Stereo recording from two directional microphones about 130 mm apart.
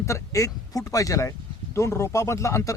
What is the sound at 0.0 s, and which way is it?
Speech, 25° left (ahead or behind).